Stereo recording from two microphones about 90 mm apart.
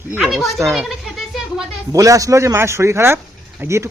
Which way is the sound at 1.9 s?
40° right (ahead or behind).